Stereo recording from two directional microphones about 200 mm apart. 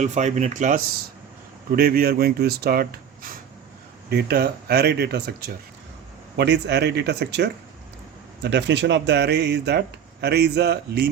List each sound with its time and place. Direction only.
0.0 s speech: 35° right (ahead or behind)
1.7 s speech: 50° right (ahead or behind)
4.1 s speech: 50° right (ahead or behind)